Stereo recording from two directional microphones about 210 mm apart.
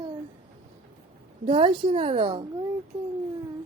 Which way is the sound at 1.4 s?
25° right (ahead or behind).